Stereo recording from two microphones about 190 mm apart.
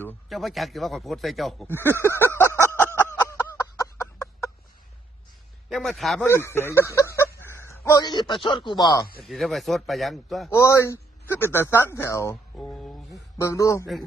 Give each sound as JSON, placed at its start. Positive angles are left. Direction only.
{"t": 0.3, "sound": "a man's voice", "side_deg": 0}
{"t": 1.6, "sound": "speech", "side_deg": 10}
{"t": 2.0, "sound": "a sound", "side_deg": 10}
{"t": 5.6, "sound": "a man's voice", "side_deg": 0}
{"t": 6.2, "sound": "speech", "side_deg": 10}
{"t": 9.2, "sound": "a man's voice", "side_deg": 0}
{"t": 10.5, "sound": "speech", "side_deg": 15}
{"t": 12.5, "sound": "a sound", "side_deg": 5}
{"t": 13.4, "sound": "speech", "side_deg": 15}